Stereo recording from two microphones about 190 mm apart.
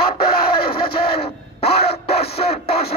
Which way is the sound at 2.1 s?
55° left (ahead or behind).